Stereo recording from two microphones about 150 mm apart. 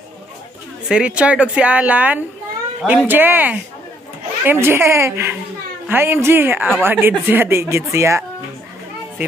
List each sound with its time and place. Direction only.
0.8 s speech: 5° right (ahead or behind)